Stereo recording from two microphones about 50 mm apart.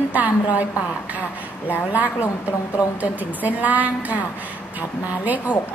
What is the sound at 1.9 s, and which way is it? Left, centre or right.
A woman's voice, right.